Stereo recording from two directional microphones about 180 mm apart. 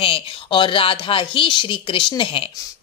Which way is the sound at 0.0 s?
30° left (ahead or behind).